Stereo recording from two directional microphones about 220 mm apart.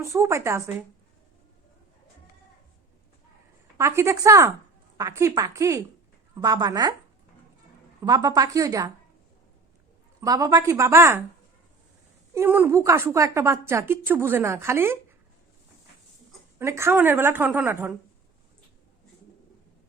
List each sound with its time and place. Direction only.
0.0 s a woman's voice: 15° right (ahead or behind)
3.8 s a woman's voice: 10° right (ahead or behind)
8.0 s a woman's voice: 20° right (ahead or behind)
10.2 s a woman's voice: 15° right (ahead or behind)
12.3 s a woman's voice: 10° right (ahead or behind)
16.6 s a woman's voice: 10° right (ahead or behind)